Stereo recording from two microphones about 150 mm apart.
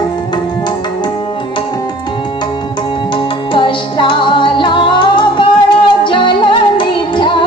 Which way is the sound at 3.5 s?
35° left (ahead or behind).